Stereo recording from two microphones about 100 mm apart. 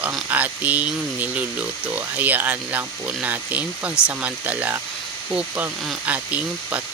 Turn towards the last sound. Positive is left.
turn(degrees=-15)  # may be behind; listen again after turning